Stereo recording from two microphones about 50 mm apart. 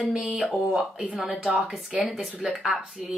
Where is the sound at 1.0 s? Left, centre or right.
Right.